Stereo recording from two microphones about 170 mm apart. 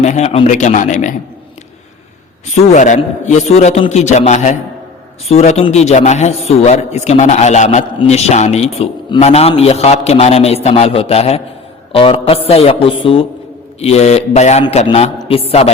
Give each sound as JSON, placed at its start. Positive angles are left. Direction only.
{"t": 0.0, "sound": "a man's voice", "side_deg": 40}
{"t": 2.7, "sound": "a man's voice", "side_deg": 45}